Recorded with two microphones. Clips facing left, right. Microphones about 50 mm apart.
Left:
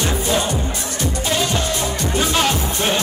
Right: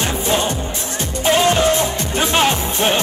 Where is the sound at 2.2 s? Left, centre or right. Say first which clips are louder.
Right 3 dB; right.